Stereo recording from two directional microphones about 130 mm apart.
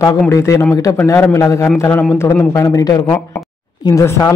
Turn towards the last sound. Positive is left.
turn(degrees=20)  # may be behind; listen again after turning